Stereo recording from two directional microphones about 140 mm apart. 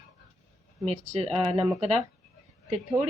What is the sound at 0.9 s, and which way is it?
Speech, 45° right (ahead or behind).